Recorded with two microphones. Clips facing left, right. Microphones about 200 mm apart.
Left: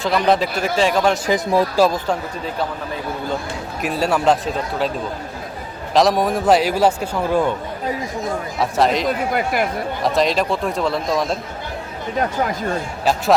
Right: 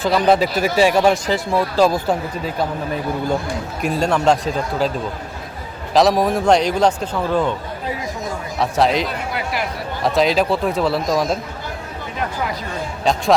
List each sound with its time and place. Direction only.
0.0 s a man's voice: centre (ahead or behind)
1.3 s speech: 15° left (ahead or behind)
3.8 s a man's voice: 5° left (ahead or behind)
5.9 s a man's voice: centre (ahead or behind)
8.5 s a man's voice: centre (ahead or behind)
9.0 s speech: 45° left (ahead or behind)
10.0 s a man's voice: centre (ahead or behind)
13.1 s a man's voice: 5° left (ahead or behind)